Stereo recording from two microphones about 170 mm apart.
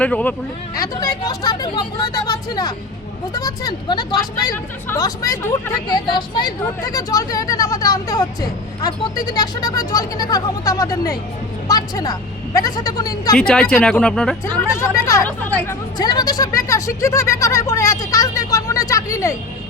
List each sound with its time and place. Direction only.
0.0 s speech: 10° left (ahead or behind)
0.8 s speech: 20° left (ahead or behind)
13.3 s speech: 5° left (ahead or behind)
14.7 s speech: 20° left (ahead or behind)